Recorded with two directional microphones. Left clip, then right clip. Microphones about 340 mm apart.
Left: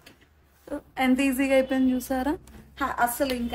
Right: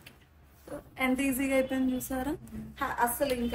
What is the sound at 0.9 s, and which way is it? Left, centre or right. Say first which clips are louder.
A woman's voice: left 6 dB; left.